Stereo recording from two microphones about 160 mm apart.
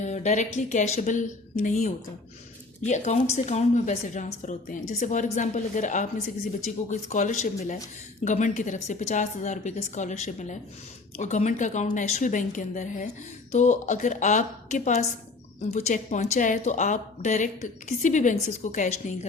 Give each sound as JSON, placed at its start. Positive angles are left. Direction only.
{"t": 0.0, "sound": "a woman's voice", "side_deg": 45}